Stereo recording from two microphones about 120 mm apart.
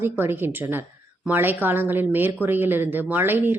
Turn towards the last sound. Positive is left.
turn(degrees=-15)  # may be behind; listen again after turning